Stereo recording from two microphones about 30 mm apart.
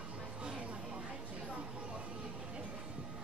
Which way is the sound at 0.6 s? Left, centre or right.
Right.